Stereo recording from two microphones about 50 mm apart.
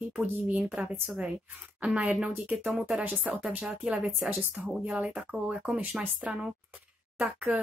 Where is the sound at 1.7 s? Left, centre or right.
Right.